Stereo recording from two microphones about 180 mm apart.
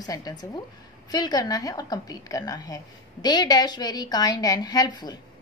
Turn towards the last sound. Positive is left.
turn(degrees=25)  # may be behind; listen again after turning